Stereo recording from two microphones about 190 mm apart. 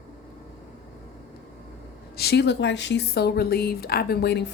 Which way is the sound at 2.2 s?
60° left (ahead or behind).